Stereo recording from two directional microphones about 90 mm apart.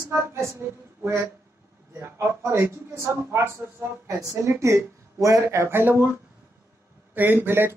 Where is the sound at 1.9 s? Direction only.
30° right (ahead or behind).